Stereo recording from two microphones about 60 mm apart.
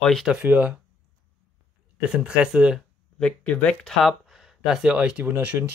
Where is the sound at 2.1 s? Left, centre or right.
Centre.